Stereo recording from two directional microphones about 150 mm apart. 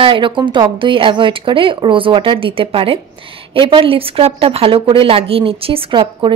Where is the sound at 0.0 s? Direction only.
35° right (ahead or behind).